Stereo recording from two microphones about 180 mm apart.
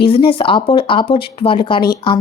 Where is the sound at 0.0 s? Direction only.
30° left (ahead or behind).